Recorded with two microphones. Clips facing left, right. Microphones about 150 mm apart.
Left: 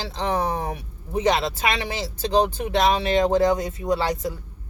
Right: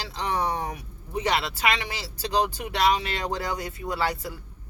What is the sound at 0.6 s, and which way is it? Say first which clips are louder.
Speech: left 3 dB; 25° left (ahead or behind).